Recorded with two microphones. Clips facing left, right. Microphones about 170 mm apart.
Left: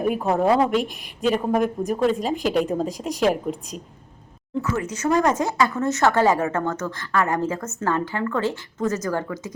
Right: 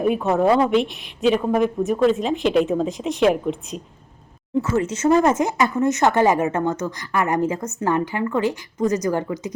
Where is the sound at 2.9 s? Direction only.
40° left (ahead or behind).